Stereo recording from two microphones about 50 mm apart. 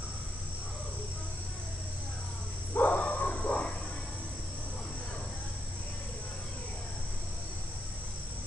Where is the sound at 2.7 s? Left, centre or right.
Left.